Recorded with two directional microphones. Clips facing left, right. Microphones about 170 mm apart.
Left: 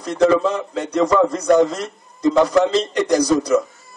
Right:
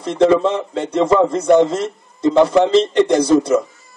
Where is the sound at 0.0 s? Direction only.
25° right (ahead or behind).